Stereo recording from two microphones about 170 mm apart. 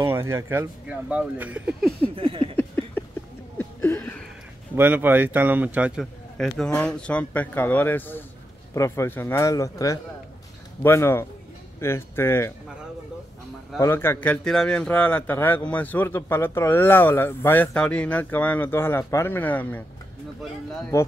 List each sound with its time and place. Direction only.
0.0 s speech: 15° right (ahead or behind)
2.0 s a sound: 35° right (ahead or behind)
2.5 s a sound: 10° left (ahead or behind)
4.7 s speech: 10° right (ahead or behind)
6.3 s a man's voice: 5° left (ahead or behind)
13.7 s a man's voice: 15° left (ahead or behind)
20.9 s a man's voice: 15° left (ahead or behind)